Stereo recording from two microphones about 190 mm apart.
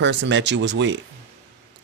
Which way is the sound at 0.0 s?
70° right (ahead or behind).